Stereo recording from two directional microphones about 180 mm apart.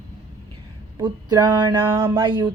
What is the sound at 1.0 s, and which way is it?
Music, 25° right (ahead or behind).